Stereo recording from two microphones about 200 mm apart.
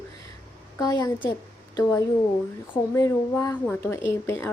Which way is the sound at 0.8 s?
15° left (ahead or behind).